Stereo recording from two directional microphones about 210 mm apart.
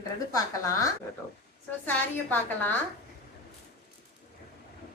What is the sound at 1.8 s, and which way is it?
Speech, 10° left (ahead or behind).